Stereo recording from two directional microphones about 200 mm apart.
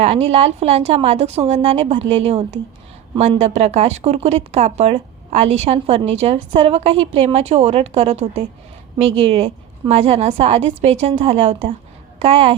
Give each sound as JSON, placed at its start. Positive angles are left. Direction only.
{"t": 0.0, "sound": "a woman's voice", "side_deg": -30}